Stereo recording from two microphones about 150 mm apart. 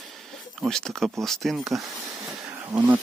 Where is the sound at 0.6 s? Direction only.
5° left (ahead or behind).